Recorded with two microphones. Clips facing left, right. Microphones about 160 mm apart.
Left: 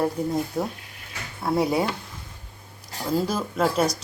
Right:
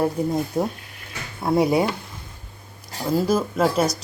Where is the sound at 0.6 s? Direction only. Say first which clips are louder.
Right 4 dB; 15° right (ahead or behind).